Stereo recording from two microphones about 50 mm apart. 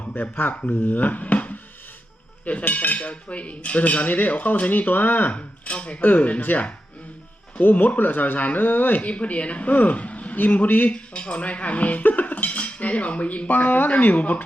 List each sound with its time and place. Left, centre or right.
0.1 s speech: left
2.4 s cutlery: left
6.0 s speech: left
9.0 s cutlery: left
10.9 s cutlery: left